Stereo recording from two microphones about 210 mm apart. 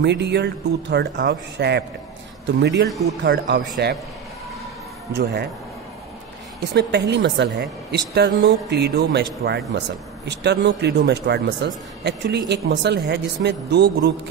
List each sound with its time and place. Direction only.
0.0 s speech: 55° right (ahead or behind)
5.1 s speech: 55° right (ahead or behind)
6.7 s speech: 55° right (ahead or behind)